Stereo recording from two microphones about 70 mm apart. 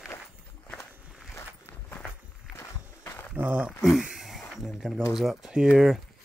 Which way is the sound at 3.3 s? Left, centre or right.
Centre.